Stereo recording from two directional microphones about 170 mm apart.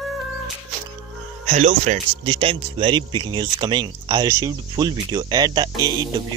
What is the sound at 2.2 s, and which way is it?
A man's voice, 30° right (ahead or behind).